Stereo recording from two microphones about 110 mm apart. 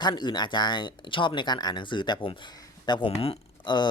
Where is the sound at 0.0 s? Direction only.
40° left (ahead or behind).